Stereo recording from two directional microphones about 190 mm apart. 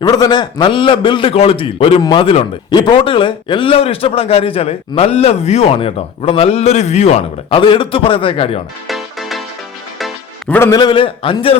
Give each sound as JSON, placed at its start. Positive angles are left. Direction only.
{"t": 0.0, "sound": "a man's voice", "side_deg": 20}
{"t": 8.9, "sound": "music", "side_deg": 0}
{"t": 10.6, "sound": "a man's voice", "side_deg": 20}